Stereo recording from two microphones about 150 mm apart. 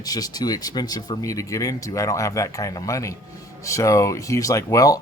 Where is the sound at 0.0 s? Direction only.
25° left (ahead or behind).